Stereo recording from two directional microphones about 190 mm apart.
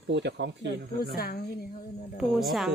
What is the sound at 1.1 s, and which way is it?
Speech, 50° left (ahead or behind).